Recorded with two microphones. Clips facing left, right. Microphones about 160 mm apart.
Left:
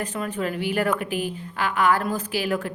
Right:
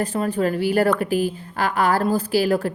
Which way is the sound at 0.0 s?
35° right (ahead or behind).